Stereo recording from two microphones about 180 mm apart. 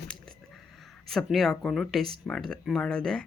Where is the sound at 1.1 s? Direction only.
Centre (ahead or behind).